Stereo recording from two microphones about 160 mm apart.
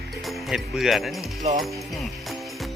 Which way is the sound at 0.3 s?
Centre (ahead or behind).